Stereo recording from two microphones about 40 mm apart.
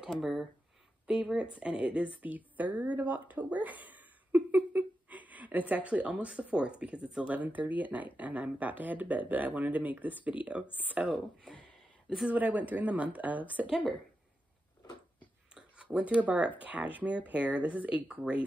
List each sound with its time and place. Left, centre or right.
0.2 s speech: centre
1.0 s a woman's voice: centre
2.3 s a woman's voice: right
7.3 s speech: right
11.0 s a woman's voice: right
12.3 s speech: right
15.8 s speech: right